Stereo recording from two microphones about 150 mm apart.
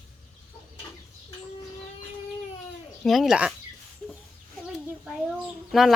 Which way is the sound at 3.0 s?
Centre (ahead or behind).